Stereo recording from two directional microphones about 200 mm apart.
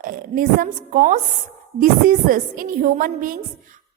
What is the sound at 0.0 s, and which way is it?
A woman's voice, 45° right (ahead or behind).